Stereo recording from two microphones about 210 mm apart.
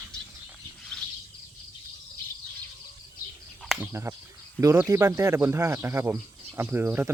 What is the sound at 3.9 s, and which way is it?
Speech, 15° right (ahead or behind).